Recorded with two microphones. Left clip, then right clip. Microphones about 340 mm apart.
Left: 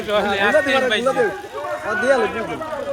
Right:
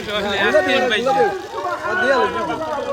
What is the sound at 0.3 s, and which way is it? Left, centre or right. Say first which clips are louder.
Speech: right 3 dB; centre.